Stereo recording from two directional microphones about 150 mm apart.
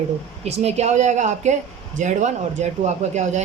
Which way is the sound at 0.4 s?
45° right (ahead or behind).